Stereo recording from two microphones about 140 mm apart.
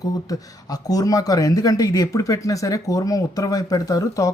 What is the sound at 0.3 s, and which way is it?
Speech, 25° left (ahead or behind).